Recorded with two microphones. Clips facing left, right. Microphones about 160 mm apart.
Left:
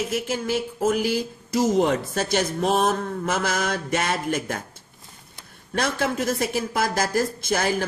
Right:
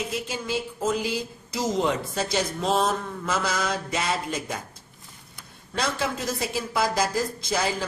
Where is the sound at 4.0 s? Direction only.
55° left (ahead or behind).